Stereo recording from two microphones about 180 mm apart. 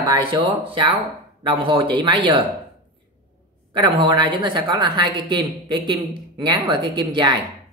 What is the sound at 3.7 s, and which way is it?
A woman's voice, 25° right (ahead or behind).